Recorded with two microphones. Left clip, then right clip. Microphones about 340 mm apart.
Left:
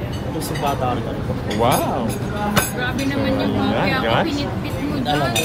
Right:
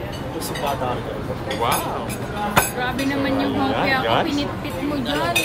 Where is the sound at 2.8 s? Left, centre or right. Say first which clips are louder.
Even; right.